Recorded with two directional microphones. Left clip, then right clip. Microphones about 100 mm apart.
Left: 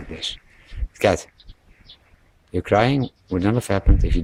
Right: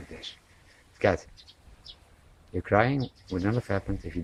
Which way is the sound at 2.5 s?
25° left (ahead or behind).